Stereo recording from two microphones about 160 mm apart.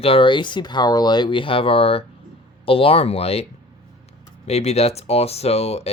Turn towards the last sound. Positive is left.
turn(degrees=40)  # may be behind; listen again after turning